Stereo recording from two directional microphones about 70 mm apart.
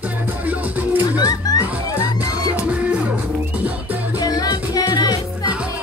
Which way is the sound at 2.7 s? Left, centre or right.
Centre.